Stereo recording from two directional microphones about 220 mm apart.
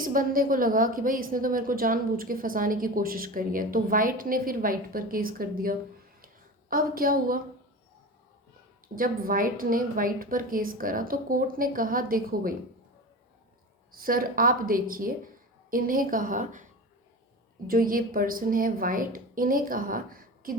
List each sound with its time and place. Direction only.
0.0 s a woman's voice: 40° right (ahead or behind)
6.2 s a sound: 40° right (ahead or behind)
9.0 s a woman's voice: 40° right (ahead or behind)
13.9 s a woman's voice: 40° right (ahead or behind)
17.7 s a woman's voice: 40° right (ahead or behind)